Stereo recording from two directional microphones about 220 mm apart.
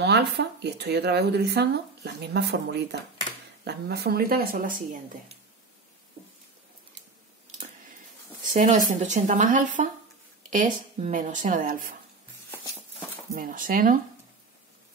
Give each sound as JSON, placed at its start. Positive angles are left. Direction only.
{"t": 0.0, "sound": "speech", "side_deg": -50}
{"t": 8.5, "sound": "speech", "side_deg": -35}
{"t": 12.4, "sound": "a sound", "side_deg": 10}
{"t": 13.3, "sound": "speech", "side_deg": -40}